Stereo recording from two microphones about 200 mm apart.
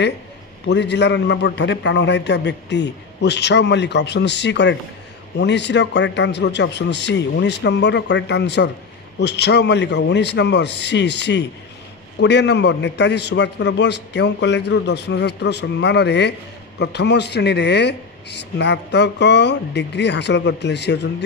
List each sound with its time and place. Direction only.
0.7 s a man's voice: 60° left (ahead or behind)